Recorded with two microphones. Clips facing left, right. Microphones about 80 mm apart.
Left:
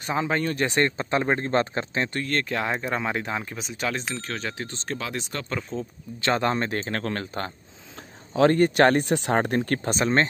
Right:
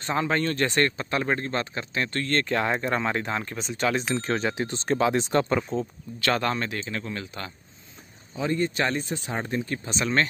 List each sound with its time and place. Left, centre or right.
0.0 s speech: centre; by 2.0 s left
2.2 s speech: centre
4.1 s speech: right
4.9 s speech: right
5.5 s speech: centre
6.2 s speech: left
6.7 s speech: left
8.3 s speech: left
9.9 s speech: left